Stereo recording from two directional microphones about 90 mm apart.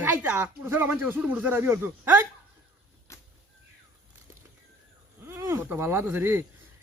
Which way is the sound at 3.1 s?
30° left (ahead or behind).